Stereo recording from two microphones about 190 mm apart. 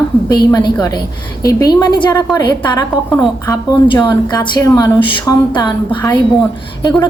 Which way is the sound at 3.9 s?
25° left (ahead or behind).